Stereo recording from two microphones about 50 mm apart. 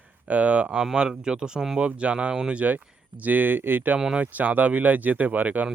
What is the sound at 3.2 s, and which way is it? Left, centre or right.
Speech, right.